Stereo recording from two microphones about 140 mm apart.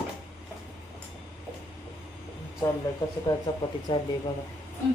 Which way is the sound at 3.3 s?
30° left (ahead or behind).